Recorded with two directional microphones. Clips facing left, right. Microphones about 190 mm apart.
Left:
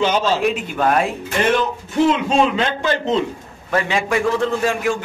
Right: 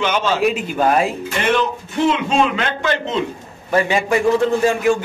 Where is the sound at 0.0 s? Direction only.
35° left (ahead or behind).